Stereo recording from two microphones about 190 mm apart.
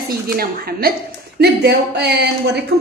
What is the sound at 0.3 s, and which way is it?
A woman's voice, 55° right (ahead or behind).